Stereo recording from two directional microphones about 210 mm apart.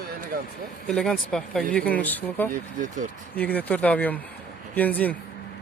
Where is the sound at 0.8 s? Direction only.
5° left (ahead or behind).